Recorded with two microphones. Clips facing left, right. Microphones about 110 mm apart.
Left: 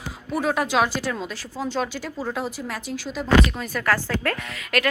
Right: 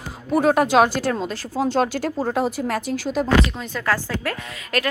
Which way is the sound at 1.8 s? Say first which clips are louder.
Right 6 dB; 65° right (ahead or behind).